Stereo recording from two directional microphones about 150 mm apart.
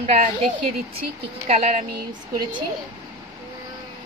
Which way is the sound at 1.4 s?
45° right (ahead or behind).